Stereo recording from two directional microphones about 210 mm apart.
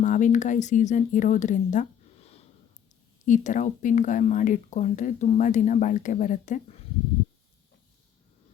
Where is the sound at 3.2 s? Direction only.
35° left (ahead or behind).